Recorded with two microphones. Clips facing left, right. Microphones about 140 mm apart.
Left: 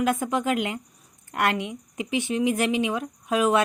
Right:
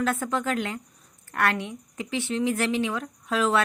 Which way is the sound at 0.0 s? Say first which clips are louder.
Left 2 dB; 15° left (ahead or behind).